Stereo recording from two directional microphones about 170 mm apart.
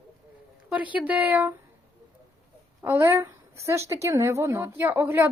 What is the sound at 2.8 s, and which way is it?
A woman's voice, 15° right (ahead or behind).